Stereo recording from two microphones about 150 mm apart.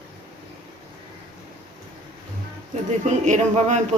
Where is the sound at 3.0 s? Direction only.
50° right (ahead or behind).